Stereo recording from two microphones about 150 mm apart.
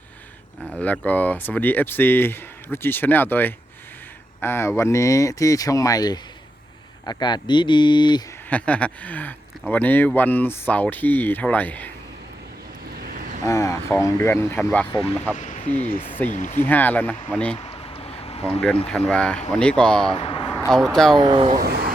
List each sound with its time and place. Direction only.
0.8 s speech: 10° left (ahead or behind); by 8.2 s 30° left (ahead or behind)
8.4 s speech: 10° left (ahead or behind)
13.4 s speech: 20° left (ahead or behind)
15.4 s speech: 55° left (ahead or behind)
16.6 s speech: 10° left (ahead or behind)
17.6 s a sound: 40° left (ahead or behind)
18.9 s speech: 5° left (ahead or behind)
20.1 s a sound: 35° left (ahead or behind)
20.5 s speech: 5° left (ahead or behind)
21.2 s speech: 30° right (ahead or behind)
21.6 s vehicle: 90° right